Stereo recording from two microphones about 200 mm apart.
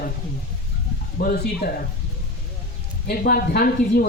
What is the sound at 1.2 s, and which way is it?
Speech, 50° left (ahead or behind).